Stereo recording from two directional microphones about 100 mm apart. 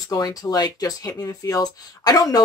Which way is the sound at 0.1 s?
40° left (ahead or behind).